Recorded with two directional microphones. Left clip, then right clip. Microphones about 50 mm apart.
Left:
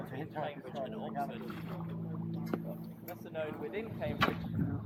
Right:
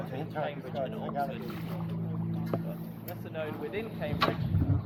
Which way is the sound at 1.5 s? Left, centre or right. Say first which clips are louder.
Right 4 dB; right.